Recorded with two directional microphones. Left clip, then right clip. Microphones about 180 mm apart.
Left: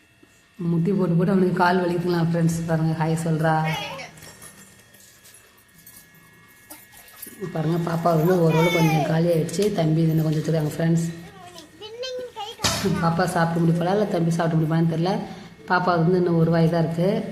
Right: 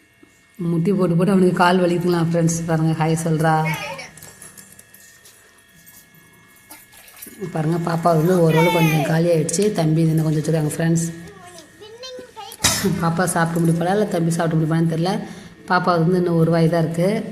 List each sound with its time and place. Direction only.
0.6 s speech: 15° right (ahead or behind)
7.5 s speech: 10° right (ahead or behind)
11.8 s a sound: 60° left (ahead or behind)
13.1 s a woman's voice: 10° right (ahead or behind)